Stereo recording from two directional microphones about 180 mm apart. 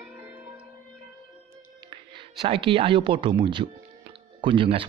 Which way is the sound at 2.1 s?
30° right (ahead or behind).